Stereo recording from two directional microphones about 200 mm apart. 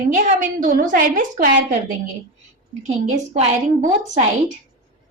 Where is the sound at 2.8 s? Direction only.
35° right (ahead or behind).